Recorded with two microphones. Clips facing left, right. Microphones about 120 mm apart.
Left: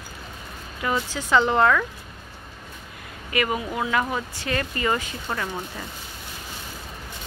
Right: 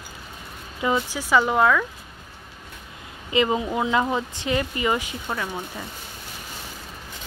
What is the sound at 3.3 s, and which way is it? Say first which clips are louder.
Speech: right 4 dB; 20° right (ahead or behind).